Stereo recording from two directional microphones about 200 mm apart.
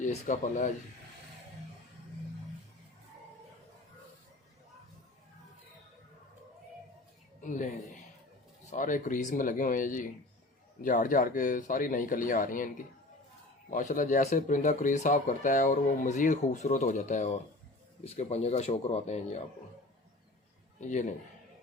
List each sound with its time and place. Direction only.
0.0 s speech: 35° left (ahead or behind)
7.4 s speech: 40° left (ahead or behind)
8.7 s speech: 40° left (ahead or behind)